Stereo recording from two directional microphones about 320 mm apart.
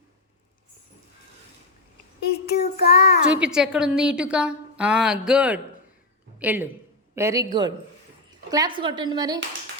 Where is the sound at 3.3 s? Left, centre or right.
Centre.